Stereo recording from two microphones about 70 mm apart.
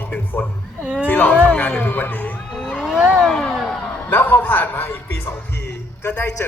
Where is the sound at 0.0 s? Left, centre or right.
Left.